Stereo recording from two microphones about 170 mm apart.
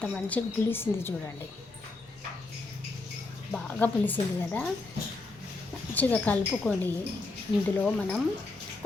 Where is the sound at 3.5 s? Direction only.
10° left (ahead or behind).